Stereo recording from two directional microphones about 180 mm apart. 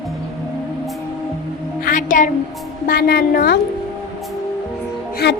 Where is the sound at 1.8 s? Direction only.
45° left (ahead or behind).